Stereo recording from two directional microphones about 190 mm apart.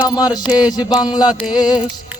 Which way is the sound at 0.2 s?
20° left (ahead or behind).